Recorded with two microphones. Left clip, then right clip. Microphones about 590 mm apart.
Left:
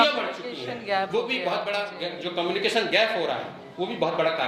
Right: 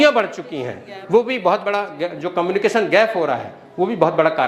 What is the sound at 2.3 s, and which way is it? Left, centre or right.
Speech, right.